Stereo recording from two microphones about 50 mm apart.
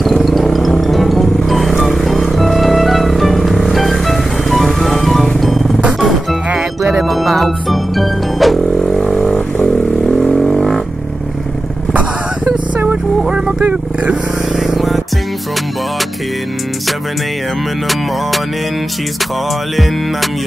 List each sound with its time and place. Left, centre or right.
0.0 s music: centre
7.0 s music: centre
8.8 s vehicle: centre
13.3 s vehicle: right
14.6 s music: centre